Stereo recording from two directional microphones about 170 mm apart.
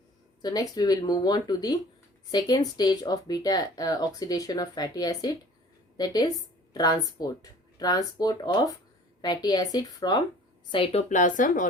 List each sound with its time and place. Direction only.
0.4 s speech: 20° left (ahead or behind)
11.1 s speech: 50° left (ahead or behind)